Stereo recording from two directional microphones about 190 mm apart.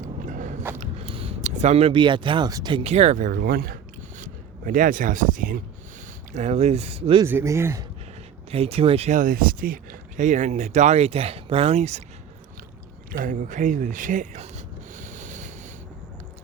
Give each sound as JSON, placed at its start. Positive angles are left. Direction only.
{"t": 0.0, "sound": "biting", "side_deg": -45}
{"t": 0.8, "sound": "speech", "side_deg": -30}
{"t": 6.3, "sound": "speech", "side_deg": -35}
{"t": 7.3, "sound": "speech", "side_deg": -15}
{"t": 8.4, "sound": "speech", "side_deg": -30}
{"t": 13.1, "sound": "a sound", "side_deg": -45}